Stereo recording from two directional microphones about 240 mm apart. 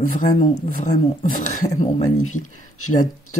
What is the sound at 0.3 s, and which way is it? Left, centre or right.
Speech, left.